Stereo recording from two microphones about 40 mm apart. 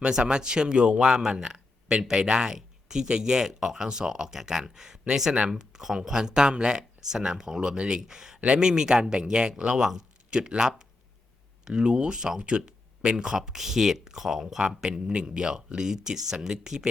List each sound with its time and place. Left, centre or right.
0.0 s speech: right
14.8 s speech: centre